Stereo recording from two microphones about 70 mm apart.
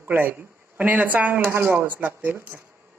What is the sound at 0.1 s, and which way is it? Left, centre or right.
Speech, right.